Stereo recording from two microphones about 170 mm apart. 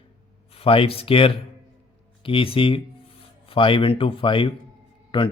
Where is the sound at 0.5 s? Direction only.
35° left (ahead or behind).